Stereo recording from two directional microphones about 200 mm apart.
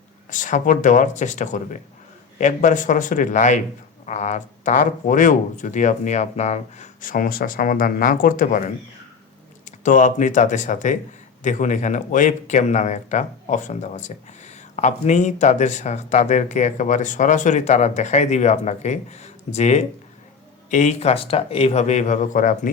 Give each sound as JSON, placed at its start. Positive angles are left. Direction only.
{"t": 0.3, "sound": "speech", "side_deg": 40}
{"t": 9.6, "sound": "speech", "side_deg": 40}